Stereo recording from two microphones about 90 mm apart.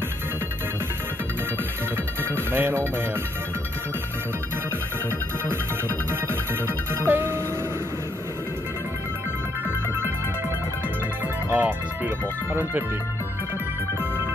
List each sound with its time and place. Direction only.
2.3 s music: 25° right (ahead or behind)
6.9 s music: 25° right (ahead or behind)
11.5 s speech: 15° right (ahead or behind)